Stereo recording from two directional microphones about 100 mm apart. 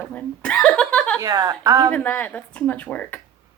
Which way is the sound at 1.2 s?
40° right (ahead or behind).